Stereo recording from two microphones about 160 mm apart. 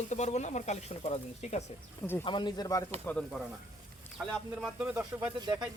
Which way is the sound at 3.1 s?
5° left (ahead or behind).